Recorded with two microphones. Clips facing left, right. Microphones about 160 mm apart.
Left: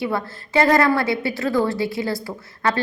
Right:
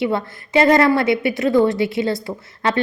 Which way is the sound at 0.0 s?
20° right (ahead or behind).